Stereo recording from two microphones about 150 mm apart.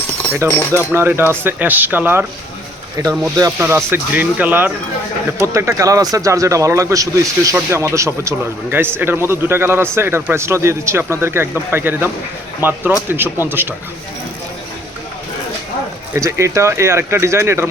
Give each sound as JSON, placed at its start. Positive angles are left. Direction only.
{"t": 0.4, "sound": "a man's voice", "side_deg": -15}
{"t": 3.0, "sound": "a man's voice", "side_deg": -25}
{"t": 16.1, "sound": "a man's voice", "side_deg": -20}